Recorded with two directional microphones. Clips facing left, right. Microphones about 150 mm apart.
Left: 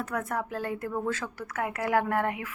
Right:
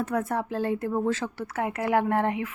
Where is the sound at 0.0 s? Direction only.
30° right (ahead or behind).